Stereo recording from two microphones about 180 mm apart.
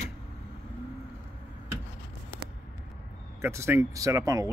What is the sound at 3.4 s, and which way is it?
Speech, 15° right (ahead or behind).